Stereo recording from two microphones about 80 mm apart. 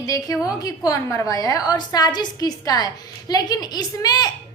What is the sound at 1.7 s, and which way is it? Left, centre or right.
A woman's voice, left.